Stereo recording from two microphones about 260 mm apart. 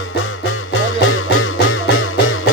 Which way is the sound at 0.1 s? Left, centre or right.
Left.